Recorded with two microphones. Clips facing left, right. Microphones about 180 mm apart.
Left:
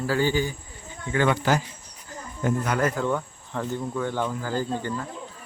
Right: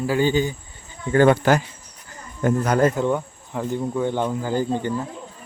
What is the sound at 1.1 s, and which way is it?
Speech, 45° right (ahead or behind).